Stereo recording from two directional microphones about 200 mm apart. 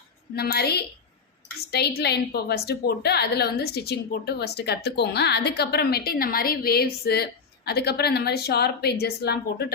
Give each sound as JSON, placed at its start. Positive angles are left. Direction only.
{"t": 0.3, "sound": "a woman's voice", "side_deg": 50}